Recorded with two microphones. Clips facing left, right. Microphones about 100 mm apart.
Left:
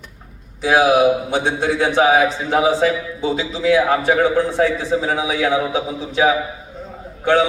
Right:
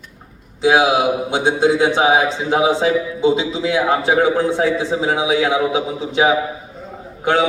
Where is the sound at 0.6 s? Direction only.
20° right (ahead or behind).